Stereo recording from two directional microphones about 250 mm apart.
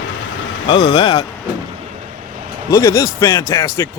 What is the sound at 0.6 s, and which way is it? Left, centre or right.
Speech, centre.